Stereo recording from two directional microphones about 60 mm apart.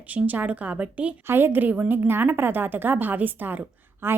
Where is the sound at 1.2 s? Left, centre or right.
Right.